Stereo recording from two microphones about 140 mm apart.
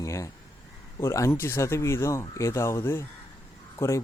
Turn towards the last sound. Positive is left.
turn(degrees=20)  # may be behind; listen again after turning